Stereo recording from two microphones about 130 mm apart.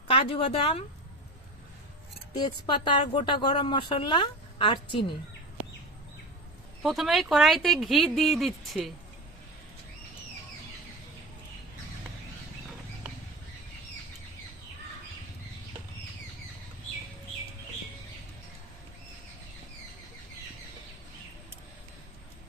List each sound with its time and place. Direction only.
0.1 s a woman's voice: 45° left (ahead or behind)
2.3 s a woman's voice: 35° left (ahead or behind)
6.8 s speech: centre (ahead or behind)